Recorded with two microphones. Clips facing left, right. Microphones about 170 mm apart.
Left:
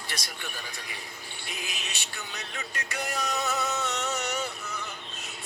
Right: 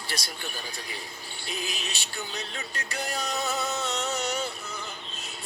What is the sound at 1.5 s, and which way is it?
Speech, 30° right (ahead or behind).